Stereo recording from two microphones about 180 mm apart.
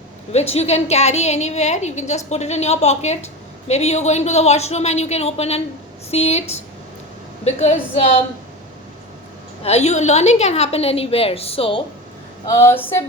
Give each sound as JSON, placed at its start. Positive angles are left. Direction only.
{"t": 0.3, "sound": "a woman's voice", "side_deg": 35}
{"t": 9.6, "sound": "a woman's voice", "side_deg": 35}
{"t": 12.5, "sound": "a sound", "side_deg": 15}